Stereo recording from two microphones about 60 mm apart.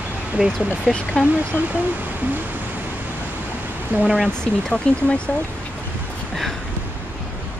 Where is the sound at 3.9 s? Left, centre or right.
Right.